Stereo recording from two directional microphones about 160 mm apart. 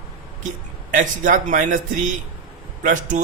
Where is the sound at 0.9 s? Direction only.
55° right (ahead or behind).